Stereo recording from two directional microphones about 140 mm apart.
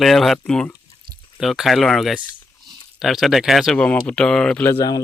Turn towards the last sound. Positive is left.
turn(degrees=25)  # may be behind; listen again after turning